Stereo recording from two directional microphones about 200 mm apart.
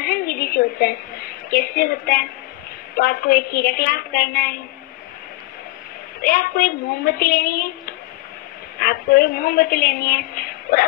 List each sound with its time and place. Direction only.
0.0 s a sound: 50° left (ahead or behind)
3.0 s a woman's voice: 50° left (ahead or behind)
6.2 s a woman's voice: 50° left (ahead or behind)